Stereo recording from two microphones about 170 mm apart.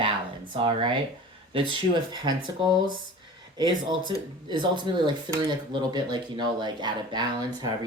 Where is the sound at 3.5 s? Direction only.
25° right (ahead or behind).